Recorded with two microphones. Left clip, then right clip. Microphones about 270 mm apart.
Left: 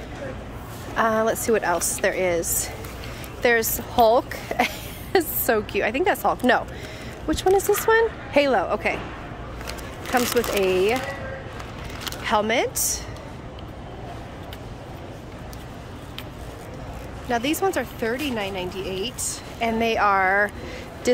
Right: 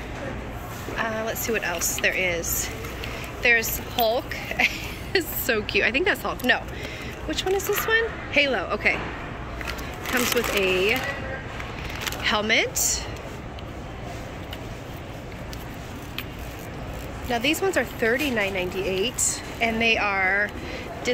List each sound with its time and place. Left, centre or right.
0.9 s a woman's voice: left
10.1 s speech: centre
12.2 s speech: centre
17.3 s speech: centre
19.6 s speech: centre